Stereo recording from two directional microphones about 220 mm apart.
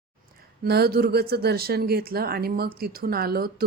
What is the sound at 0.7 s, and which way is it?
A woman's voice, 45° right (ahead or behind).